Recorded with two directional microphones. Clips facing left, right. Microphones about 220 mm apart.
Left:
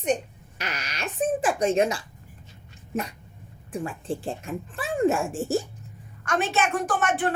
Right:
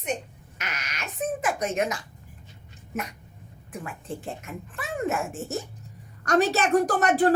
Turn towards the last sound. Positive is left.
turn(degrees=-40)  # may be behind; listen again after turning